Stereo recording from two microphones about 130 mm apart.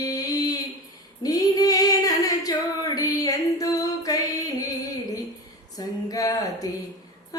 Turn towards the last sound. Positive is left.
turn(degrees=30)  # may be behind; listen again after turning